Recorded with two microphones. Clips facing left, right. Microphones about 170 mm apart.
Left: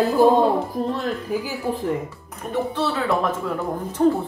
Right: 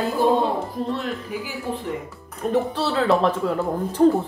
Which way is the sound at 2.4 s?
35° right (ahead or behind).